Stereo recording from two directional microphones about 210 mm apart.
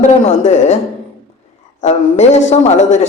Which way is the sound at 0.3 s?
30° left (ahead or behind).